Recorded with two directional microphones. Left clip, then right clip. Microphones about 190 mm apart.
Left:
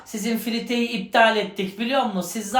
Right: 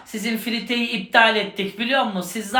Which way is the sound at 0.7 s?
20° left (ahead or behind).